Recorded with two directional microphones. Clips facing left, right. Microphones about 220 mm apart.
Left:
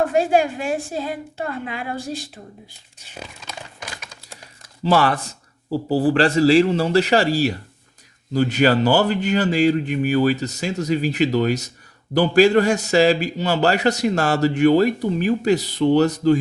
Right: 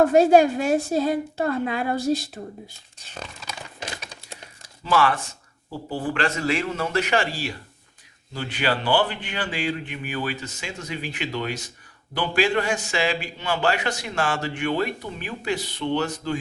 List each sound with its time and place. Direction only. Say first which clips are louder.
0.1 s a woman's voice: right 3 dB; 40° right (ahead or behind)
3.0 s a sound: left 1 dB; 10° left (ahead or behind)
3.8 s typewriter: right 2 dB; 25° right (ahead or behind)
4.8 s a man's voice: left 4 dB; 35° left (ahead or behind)